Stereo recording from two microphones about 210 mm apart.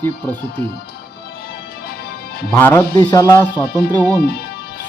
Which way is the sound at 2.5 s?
10° left (ahead or behind).